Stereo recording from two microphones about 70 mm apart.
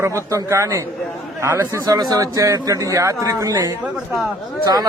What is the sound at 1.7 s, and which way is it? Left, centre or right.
Speech, right.